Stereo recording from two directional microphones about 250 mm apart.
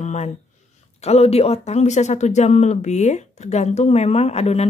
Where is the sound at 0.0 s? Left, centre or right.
Left.